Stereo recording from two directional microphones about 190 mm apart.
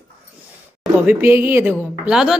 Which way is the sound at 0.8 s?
10° right (ahead or behind).